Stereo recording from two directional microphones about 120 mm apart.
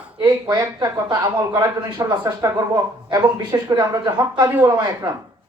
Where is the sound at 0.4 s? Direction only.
35° right (ahead or behind).